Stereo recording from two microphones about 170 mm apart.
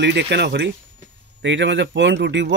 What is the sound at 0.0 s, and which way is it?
Speech, 90° right.